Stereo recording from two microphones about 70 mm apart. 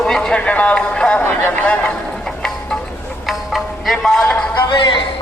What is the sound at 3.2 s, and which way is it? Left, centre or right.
Music, centre.